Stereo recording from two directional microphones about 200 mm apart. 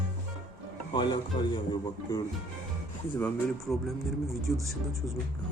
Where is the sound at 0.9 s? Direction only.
25° left (ahead or behind).